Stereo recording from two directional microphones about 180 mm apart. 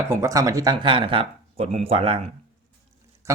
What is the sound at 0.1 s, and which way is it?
Speech, 15° right (ahead or behind).